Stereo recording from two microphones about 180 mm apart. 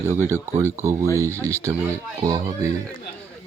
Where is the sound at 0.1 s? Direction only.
15° right (ahead or behind).